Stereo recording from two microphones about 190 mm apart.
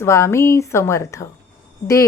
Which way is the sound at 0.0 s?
15° left (ahead or behind).